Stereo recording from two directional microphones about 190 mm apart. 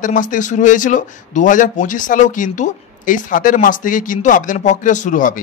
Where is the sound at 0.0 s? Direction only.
45° left (ahead or behind).